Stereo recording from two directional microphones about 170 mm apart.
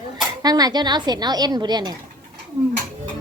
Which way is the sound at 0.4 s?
20° right (ahead or behind).